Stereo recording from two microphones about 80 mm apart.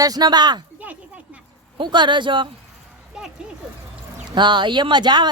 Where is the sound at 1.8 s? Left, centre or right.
Right.